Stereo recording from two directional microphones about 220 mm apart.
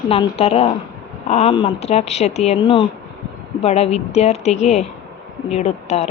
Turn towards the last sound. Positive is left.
turn(degrees=30)  # may be behind; listen again after turning